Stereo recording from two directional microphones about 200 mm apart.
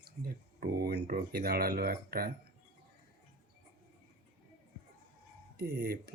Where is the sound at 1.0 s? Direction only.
50° right (ahead or behind).